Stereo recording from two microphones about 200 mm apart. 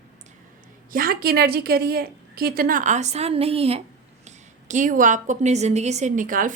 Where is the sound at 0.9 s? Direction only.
45° right (ahead or behind).